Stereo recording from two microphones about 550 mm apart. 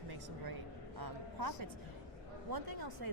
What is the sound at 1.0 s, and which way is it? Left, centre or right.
Speech, right.